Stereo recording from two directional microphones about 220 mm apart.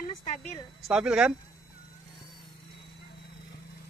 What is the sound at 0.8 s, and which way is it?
Speech, 5° right (ahead or behind).